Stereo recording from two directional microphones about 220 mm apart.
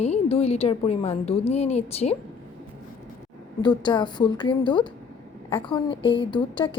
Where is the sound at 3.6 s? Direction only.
20° left (ahead or behind).